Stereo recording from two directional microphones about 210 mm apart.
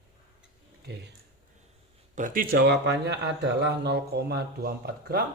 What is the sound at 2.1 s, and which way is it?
Speech, 40° right (ahead or behind).